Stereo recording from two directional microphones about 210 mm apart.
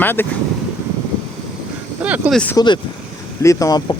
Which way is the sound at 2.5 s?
20° left (ahead or behind).